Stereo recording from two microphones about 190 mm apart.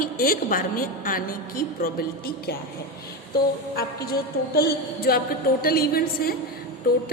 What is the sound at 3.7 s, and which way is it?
A woman's voice, 55° left (ahead or behind).